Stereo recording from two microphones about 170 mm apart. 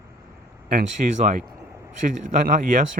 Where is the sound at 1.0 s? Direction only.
50° right (ahead or behind).